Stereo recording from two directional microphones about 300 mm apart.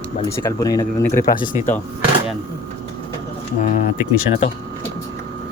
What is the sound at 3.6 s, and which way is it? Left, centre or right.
Speech, left.